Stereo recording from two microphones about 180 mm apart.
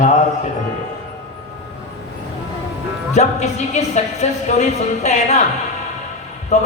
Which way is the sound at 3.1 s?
40° left (ahead or behind).